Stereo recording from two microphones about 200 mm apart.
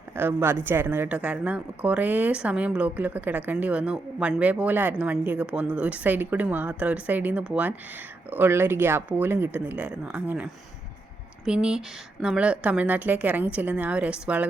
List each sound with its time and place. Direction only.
0.2 s speech: 10° right (ahead or behind)